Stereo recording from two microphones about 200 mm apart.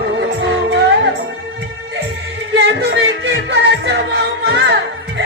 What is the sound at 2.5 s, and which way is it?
Music, 60° right (ahead or behind).